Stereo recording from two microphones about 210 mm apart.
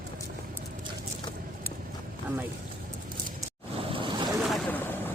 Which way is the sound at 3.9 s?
25° right (ahead or behind).